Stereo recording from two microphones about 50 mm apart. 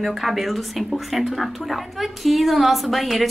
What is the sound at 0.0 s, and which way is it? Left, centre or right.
Speech, centre.